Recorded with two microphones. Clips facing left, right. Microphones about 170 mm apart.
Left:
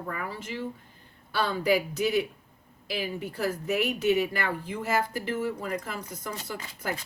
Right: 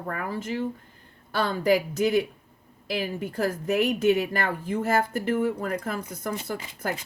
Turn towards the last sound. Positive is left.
turn(degrees=-50)  # may be behind; listen again after turning